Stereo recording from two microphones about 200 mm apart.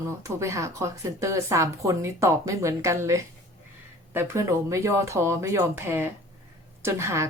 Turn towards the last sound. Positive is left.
turn(degrees=-15)  # may be behind; listen again after turning